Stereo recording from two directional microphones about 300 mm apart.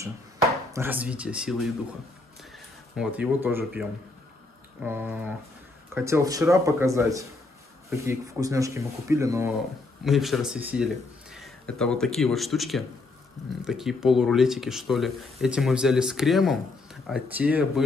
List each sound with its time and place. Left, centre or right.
0.7 s speech: centre
3.0 s speech: centre
4.8 s speech: centre